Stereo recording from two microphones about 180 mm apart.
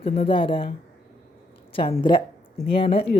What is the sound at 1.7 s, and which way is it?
Speech, 30° left (ahead or behind).